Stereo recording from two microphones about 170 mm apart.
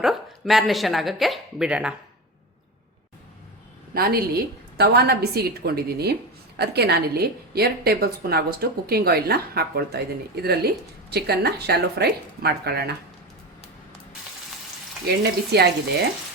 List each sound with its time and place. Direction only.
0.0 s speech: centre (ahead or behind)
3.9 s a woman's voice: 60° right (ahead or behind)
15.0 s a woman's voice: 70° right (ahead or behind)